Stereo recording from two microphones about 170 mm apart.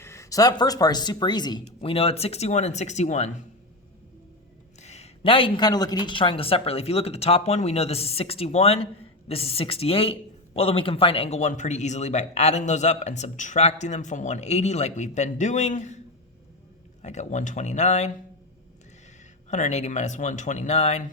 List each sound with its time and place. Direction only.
0.0 s a woman's voice: 15° left (ahead or behind); by 3.4 s 45° left (ahead or behind)
4.8 s a woman's voice: 40° left (ahead or behind)
17.0 s speech: 45° left (ahead or behind)
19.5 s speech: 45° left (ahead or behind)